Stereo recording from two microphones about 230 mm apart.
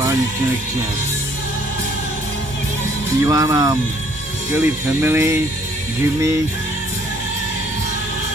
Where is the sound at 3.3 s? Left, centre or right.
Centre.